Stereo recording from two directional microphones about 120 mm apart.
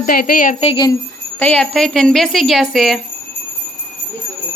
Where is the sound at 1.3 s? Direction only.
10° left (ahead or behind).